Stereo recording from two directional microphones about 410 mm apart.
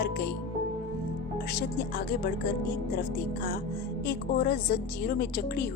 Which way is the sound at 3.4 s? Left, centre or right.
Left.